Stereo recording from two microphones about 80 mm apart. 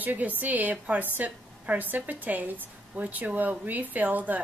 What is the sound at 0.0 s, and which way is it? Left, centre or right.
A woman's voice, right.